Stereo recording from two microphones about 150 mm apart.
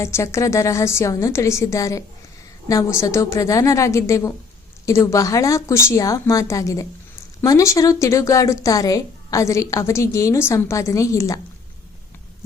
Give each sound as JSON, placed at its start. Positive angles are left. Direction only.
{"t": 0.0, "sound": "a woman's voice", "side_deg": 20}